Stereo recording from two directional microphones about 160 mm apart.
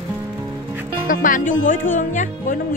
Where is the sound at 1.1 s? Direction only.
55° left (ahead or behind).